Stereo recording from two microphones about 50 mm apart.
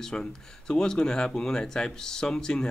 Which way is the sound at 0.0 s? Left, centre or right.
Centre.